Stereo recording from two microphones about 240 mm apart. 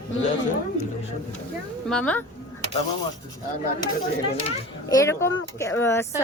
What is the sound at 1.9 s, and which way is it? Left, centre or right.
Speech, centre.